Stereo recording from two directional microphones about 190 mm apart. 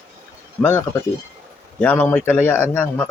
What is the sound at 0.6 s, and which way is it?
Speech, 10° left (ahead or behind).